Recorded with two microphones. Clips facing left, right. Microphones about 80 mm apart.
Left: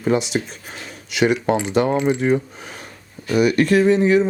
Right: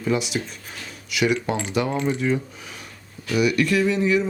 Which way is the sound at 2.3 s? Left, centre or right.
Left.